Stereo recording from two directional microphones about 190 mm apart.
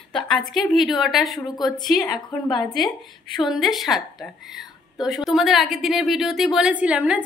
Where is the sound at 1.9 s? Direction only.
20° left (ahead or behind).